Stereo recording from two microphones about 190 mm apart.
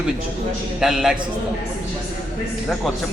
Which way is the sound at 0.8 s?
5° right (ahead or behind).